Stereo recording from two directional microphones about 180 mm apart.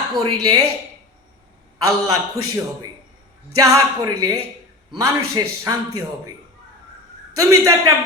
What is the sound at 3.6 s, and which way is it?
Speech, 20° right (ahead or behind).